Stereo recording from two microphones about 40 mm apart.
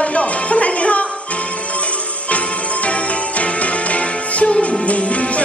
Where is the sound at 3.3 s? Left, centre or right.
Left.